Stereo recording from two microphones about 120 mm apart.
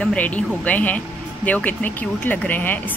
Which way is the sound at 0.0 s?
10° left (ahead or behind).